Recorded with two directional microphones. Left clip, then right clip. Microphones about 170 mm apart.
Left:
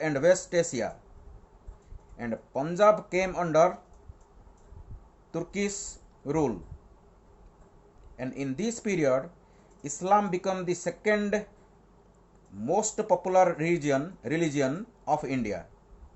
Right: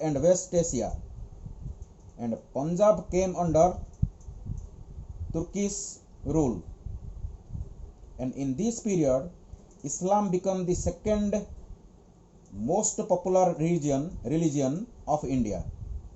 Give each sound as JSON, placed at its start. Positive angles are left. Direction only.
{"t": 0.0, "sound": "speech", "side_deg": 35}
{"t": 2.1, "sound": "speech", "side_deg": 35}
{"t": 5.3, "sound": "speech", "side_deg": 35}
{"t": 8.1, "sound": "speech", "side_deg": 35}
{"t": 12.6, "sound": "speech", "side_deg": 35}